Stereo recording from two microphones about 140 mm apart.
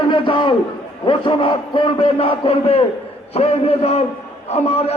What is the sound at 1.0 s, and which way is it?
A man's voice, 35° left (ahead or behind).